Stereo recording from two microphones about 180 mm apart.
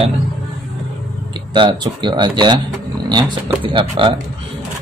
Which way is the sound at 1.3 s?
25° right (ahead or behind).